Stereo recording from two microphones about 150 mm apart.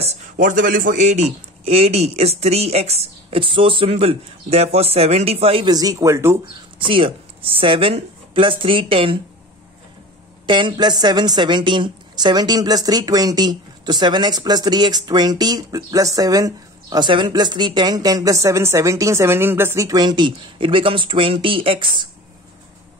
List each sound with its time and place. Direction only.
0.0 s a man's voice: 60° right (ahead or behind); by 5.7 s 40° right (ahead or behind)
5.7 s a woman's voice: 25° right (ahead or behind)
6.9 s speech: 35° right (ahead or behind)
10.4 s a woman's voice: 30° right (ahead or behind)